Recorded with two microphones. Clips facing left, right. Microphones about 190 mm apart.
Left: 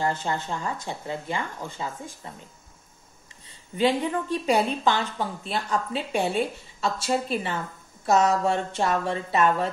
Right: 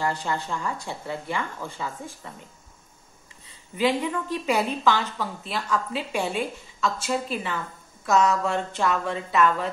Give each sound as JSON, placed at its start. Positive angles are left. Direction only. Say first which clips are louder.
{"t": 0.0, "sound": "speech", "louder": "left 1 dB", "side_deg": 20}
{"t": 3.7, "sound": "a woman's voice", "louder": "left 1 dB", "side_deg": 30}
{"t": 8.3, "sound": "speech", "louder": "left 1 dB", "side_deg": 30}